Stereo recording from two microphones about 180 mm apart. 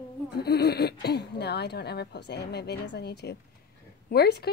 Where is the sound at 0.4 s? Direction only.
65° left (ahead or behind).